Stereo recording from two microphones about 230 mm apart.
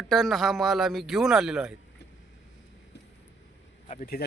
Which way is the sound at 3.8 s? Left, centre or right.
Left.